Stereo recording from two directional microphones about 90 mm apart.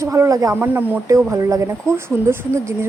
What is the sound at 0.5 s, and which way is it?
Speech, 20° right (ahead or behind).